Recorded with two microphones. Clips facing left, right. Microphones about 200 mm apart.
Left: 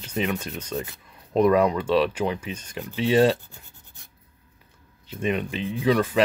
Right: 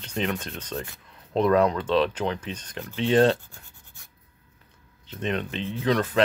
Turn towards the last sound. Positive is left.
turn(degrees=10)  # may be behind; listen again after turning